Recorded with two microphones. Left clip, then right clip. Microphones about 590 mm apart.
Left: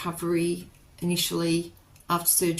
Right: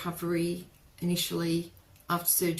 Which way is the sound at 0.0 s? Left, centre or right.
Right.